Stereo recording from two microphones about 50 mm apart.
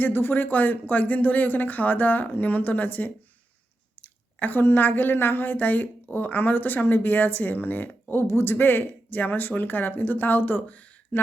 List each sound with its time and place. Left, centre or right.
0.0 s speech: left
0.4 s a woman's voice: left
8.3 s speech: left
8.5 s a woman's voice: left